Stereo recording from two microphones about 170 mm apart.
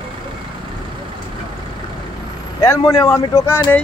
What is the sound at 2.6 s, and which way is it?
Speech, 20° left (ahead or behind).